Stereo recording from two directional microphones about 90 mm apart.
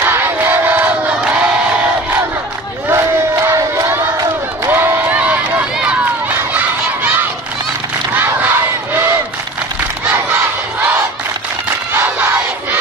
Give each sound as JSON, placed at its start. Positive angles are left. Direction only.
{"t": 0.0, "sound": "crowd", "side_deg": -25}
{"t": 2.9, "sound": "crowd", "side_deg": -30}
{"t": 6.5, "sound": "a sound", "side_deg": -20}
{"t": 8.4, "sound": "battle cry", "side_deg": -20}
{"t": 11.9, "sound": "battle cry", "side_deg": -25}